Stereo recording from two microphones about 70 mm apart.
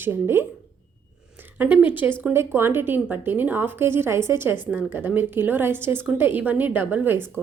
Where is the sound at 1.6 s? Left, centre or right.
Right.